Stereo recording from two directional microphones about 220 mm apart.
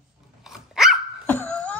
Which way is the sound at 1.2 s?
10° left (ahead or behind).